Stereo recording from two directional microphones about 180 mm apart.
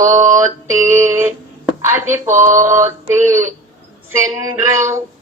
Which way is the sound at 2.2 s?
45° right (ahead or behind).